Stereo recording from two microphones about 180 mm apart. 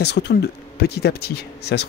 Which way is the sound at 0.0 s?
70° left (ahead or behind).